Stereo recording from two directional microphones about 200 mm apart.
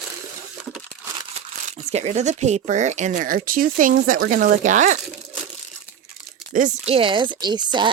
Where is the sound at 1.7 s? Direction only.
35° right (ahead or behind).